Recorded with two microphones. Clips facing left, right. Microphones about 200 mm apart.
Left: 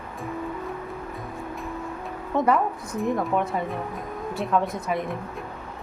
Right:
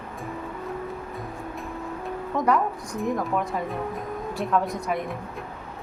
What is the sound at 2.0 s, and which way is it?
A woman's voice, centre (ahead or behind).